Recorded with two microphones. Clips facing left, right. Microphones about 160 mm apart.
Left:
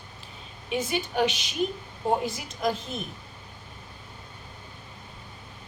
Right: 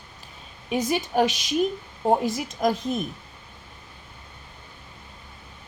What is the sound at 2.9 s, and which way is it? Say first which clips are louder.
Speech: right 7 dB; 45° right (ahead or behind).